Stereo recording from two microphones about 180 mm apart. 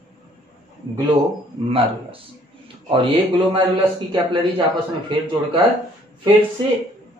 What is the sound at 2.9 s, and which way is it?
Speech, 30° right (ahead or behind).